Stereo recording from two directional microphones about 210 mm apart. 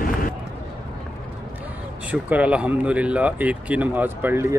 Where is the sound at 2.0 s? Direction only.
5° right (ahead or behind).